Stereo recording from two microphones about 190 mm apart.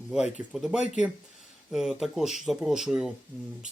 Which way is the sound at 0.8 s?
40° left (ahead or behind).